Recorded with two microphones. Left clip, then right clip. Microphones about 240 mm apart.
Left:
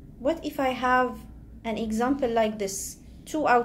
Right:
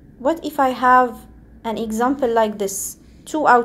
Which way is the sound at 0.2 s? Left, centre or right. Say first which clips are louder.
Right 8 dB; right.